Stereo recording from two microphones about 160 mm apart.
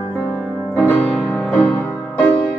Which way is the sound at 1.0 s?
5° left (ahead or behind).